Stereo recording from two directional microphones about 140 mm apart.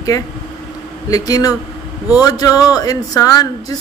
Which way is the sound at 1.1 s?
25° left (ahead or behind).